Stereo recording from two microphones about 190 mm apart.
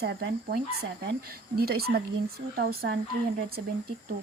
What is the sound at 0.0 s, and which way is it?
Speech, 60° right (ahead or behind).